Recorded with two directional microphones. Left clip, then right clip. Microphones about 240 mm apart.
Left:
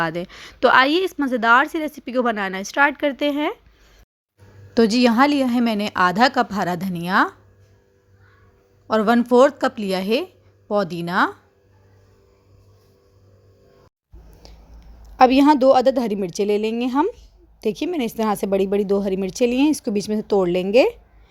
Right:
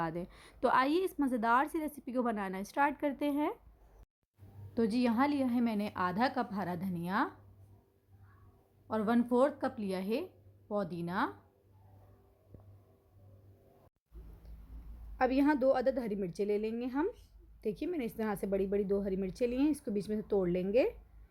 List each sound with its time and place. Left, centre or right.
0.0 s a woman's voice: centre
4.7 s speech: left
8.9 s speech: left
14.4 s a sound: left
15.2 s speech: left